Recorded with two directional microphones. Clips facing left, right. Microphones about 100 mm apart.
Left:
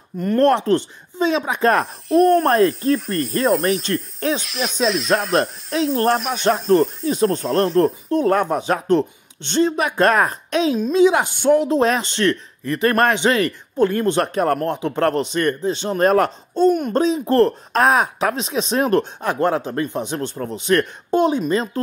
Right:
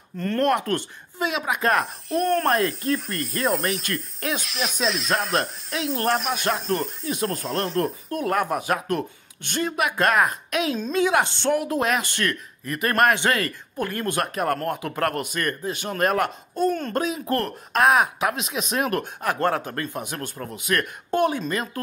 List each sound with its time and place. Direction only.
0.4 s a man's voice: 30° left (ahead or behind)
2.0 s speech: centre (ahead or behind)
2.8 s speech: 35° left (ahead or behind)
4.4 s speech: centre (ahead or behind)
5.7 s speech: 35° left (ahead or behind)
6.1 s speech: centre (ahead or behind)
7.8 s a man's voice: 30° left (ahead or behind)
10.8 s speech: 20° left (ahead or behind)
11.5 s a man's voice: 25° left (ahead or behind)